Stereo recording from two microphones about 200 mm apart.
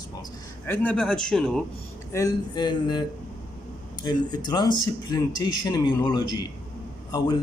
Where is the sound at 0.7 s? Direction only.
5° left (ahead or behind).